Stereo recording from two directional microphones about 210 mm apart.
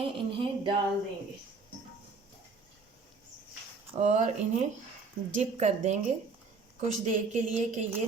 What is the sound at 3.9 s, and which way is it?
A woman's voice, 35° right (ahead or behind).